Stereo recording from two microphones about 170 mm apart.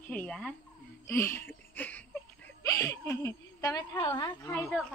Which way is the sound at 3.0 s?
15° left (ahead or behind).